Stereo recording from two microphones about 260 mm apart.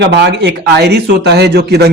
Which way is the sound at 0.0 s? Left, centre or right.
Right.